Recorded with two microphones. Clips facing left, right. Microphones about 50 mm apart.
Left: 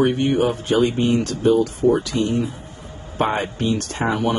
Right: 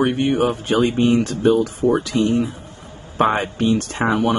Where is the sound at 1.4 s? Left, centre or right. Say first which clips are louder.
Right 1 dB; right.